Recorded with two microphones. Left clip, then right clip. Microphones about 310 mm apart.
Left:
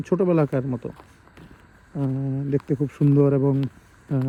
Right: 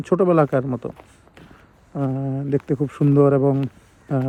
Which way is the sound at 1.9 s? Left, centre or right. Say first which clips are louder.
Right 3 dB; right.